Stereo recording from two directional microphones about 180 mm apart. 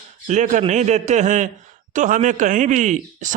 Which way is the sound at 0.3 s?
45° right (ahead or behind).